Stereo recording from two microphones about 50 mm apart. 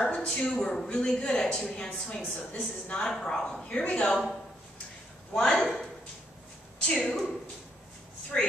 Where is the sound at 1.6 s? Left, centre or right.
Left.